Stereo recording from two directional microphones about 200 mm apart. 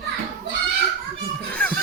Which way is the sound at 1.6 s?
5° left (ahead or behind).